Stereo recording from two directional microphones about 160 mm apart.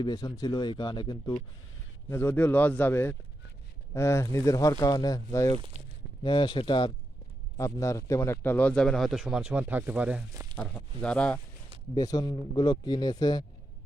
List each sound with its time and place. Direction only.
0.0 s speech: 25° left (ahead or behind)
2.0 s a man's voice: 15° left (ahead or behind)
6.2 s speech: 30° left (ahead or behind)
7.5 s a man's voice: 20° left (ahead or behind); by 10.2 s 10° right (ahead or behind)
10.6 s a man's voice: 5° left (ahead or behind)
11.9 s speech: 25° left (ahead or behind)